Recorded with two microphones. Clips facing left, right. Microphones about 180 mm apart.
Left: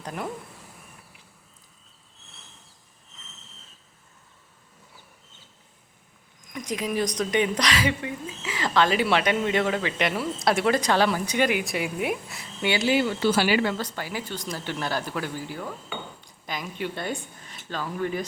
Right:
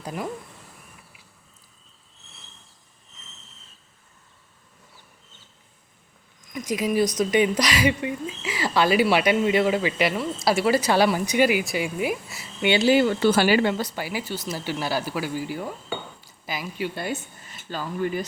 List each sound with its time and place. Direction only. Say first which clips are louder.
0.0 s speech: right 2 dB; 5° right (ahead or behind)
6.5 s speech: right 4 dB; 10° right (ahead or behind)
12.6 s speech: right 4 dB; 25° right (ahead or behind)
12.9 s speech: right 4 dB; 50° right (ahead or behind)
13.7 s speech: right 3 dB; 10° right (ahead or behind)